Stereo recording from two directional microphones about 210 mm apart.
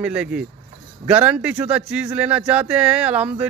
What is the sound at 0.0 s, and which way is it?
A man's voice, 5° right (ahead or behind).